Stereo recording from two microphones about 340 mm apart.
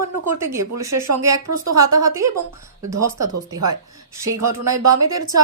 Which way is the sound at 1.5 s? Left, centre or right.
Right.